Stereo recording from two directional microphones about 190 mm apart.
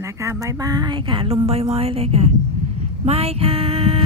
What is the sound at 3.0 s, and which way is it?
Music, 30° right (ahead or behind).